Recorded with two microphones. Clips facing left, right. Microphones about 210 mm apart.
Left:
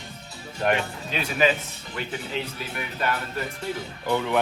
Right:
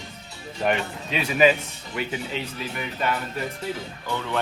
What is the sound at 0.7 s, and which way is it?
Speech, centre (ahead or behind).